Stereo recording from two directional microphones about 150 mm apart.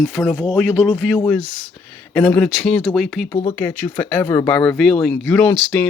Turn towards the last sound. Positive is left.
turn(degrees=5)  # may be behind; listen again after turning